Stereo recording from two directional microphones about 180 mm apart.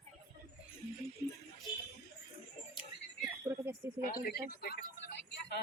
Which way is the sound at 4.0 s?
50° left (ahead or behind).